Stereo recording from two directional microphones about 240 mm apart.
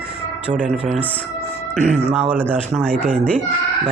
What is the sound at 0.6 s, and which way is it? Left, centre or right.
Speech, centre.